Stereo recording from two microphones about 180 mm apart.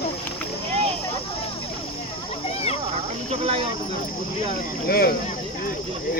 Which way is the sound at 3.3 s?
35° right (ahead or behind).